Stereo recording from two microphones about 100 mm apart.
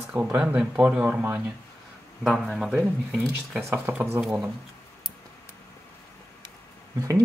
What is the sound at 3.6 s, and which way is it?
Speech, 15° right (ahead or behind).